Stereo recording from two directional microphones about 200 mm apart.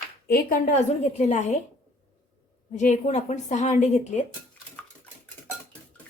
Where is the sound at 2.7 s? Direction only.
35° left (ahead or behind).